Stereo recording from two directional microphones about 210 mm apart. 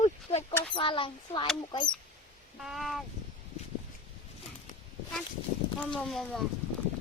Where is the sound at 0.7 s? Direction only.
25° left (ahead or behind).